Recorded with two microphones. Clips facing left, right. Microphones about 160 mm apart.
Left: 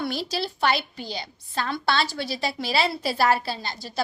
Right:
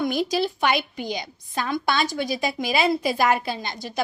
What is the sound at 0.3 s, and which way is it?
A woman's voice, 15° right (ahead or behind).